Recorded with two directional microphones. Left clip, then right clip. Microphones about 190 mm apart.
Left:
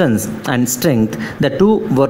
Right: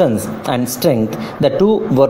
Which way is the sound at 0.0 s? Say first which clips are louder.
Right 1 dB; 35° left (ahead or behind).